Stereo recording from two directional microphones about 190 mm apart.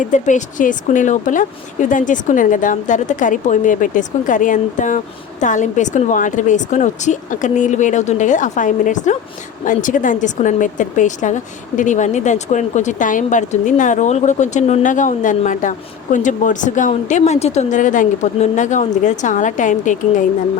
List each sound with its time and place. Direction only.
0.0 s speech: 40° left (ahead or behind)